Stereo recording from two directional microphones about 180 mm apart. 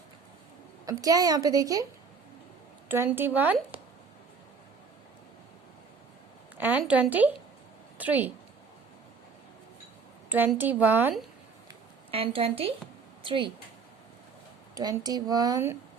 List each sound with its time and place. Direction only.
0.9 s a woman's voice: 20° right (ahead or behind)
2.9 s a woman's voice: 10° right (ahead or behind)
6.6 s a woman's voice: 10° right (ahead or behind)
10.2 s a woman's voice: 10° right (ahead or behind)
12.1 s a woman's voice: 30° right (ahead or behind)
14.8 s a woman's voice: 20° right (ahead or behind)